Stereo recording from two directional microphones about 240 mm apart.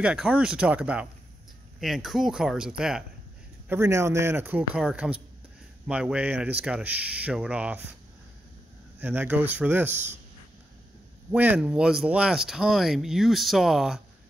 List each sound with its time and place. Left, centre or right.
0.0 s a man's voice: centre
9.0 s a man's voice: centre
11.3 s speech: centre